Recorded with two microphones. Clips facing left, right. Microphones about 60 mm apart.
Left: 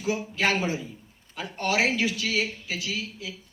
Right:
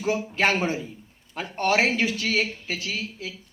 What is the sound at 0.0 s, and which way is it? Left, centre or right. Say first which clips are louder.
A man's voice: right 3 dB; right.